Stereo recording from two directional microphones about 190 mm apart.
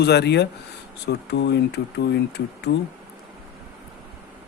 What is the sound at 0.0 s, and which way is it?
Speech, 60° left (ahead or behind).